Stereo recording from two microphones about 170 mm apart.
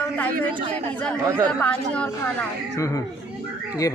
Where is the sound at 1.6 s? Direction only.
5° left (ahead or behind).